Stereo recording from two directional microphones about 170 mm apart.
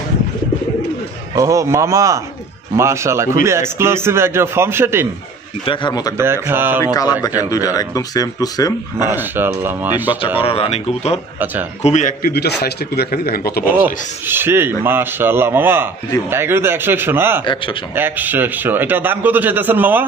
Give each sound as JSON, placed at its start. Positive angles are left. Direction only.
{"t": 1.3, "sound": "a man's voice", "side_deg": -20}
{"t": 5.7, "sound": "speech", "side_deg": 25}
{"t": 6.1, "sound": "a man's voice", "side_deg": -15}
{"t": 6.8, "sound": "speech", "side_deg": 20}
{"t": 9.1, "sound": "a man's voice", "side_deg": -10}
{"t": 10.2, "sound": "speech", "side_deg": 30}
{"t": 11.3, "sound": "speech", "side_deg": -10}
{"t": 11.8, "sound": "a man's voice", "side_deg": 45}
{"t": 13.8, "sound": "a man's voice", "side_deg": -10}